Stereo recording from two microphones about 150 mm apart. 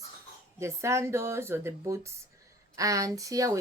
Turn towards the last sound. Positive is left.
turn(degrees=-20)  # may be behind; listen again after turning